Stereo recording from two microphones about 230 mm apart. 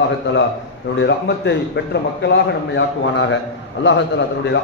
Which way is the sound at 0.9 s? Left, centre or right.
Left.